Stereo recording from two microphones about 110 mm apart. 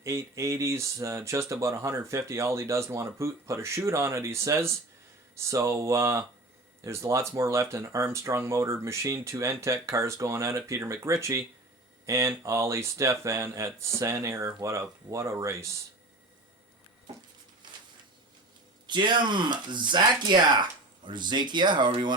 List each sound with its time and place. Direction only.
0.0 s speech: 25° right (ahead or behind)
18.9 s speech: 45° right (ahead or behind)